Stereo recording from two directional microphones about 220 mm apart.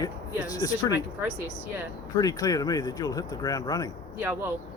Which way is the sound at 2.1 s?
15° left (ahead or behind).